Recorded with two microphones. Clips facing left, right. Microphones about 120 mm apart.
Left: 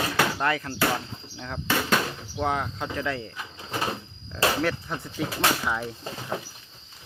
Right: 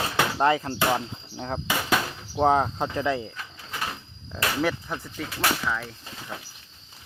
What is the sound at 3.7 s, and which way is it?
Sliding door, 30° left (ahead or behind).